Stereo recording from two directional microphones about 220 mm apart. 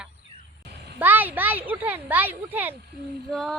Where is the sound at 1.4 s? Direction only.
10° right (ahead or behind).